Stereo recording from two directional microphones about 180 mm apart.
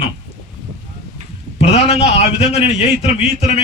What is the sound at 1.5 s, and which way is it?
A man's voice, 35° left (ahead or behind).